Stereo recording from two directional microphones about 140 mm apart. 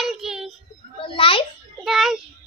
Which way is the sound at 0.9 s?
40° left (ahead or behind).